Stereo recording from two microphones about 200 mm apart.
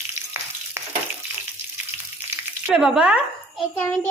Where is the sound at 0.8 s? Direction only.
10° right (ahead or behind).